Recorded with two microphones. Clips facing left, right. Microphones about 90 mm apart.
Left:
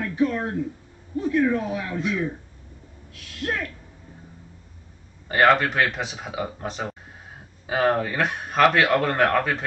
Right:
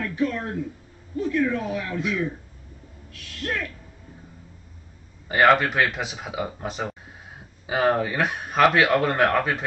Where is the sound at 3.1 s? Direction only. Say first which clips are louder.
Left 1 dB; 15° left (ahead or behind).